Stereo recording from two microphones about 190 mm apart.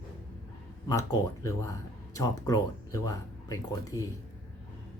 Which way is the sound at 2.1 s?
20° left (ahead or behind).